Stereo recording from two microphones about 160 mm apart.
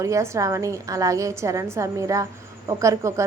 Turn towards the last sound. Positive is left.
turn(degrees=-20)  # may be behind; listen again after turning